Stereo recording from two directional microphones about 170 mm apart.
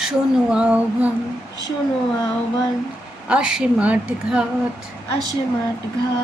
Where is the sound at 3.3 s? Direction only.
5° right (ahead or behind).